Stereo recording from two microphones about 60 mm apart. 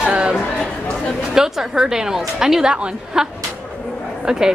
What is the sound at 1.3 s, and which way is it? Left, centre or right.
A woman's voice, centre.